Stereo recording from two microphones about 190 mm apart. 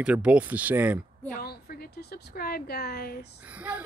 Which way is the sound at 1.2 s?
55° left (ahead or behind).